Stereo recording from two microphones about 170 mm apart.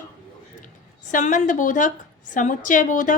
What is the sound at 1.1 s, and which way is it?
A woman's voice, 45° left (ahead or behind).